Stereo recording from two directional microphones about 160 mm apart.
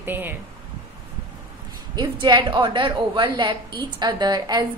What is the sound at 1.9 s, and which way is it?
A woman's voice, 25° right (ahead or behind).